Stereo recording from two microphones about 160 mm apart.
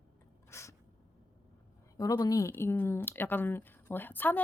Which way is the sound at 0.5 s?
20° left (ahead or behind).